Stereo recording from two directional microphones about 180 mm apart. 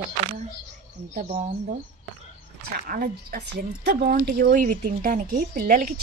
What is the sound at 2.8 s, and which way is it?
A woman's voice, 55° right (ahead or behind).